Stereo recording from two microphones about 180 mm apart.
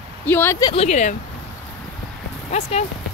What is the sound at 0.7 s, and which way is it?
Speech, 35° left (ahead or behind).